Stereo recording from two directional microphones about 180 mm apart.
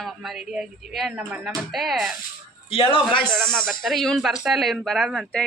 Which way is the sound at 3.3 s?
Centre (ahead or behind).